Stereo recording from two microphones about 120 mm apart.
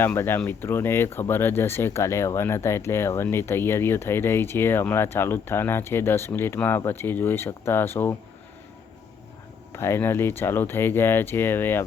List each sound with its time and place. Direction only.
0.0 s speech: 20° left (ahead or behind)
9.7 s speech: 20° left (ahead or behind)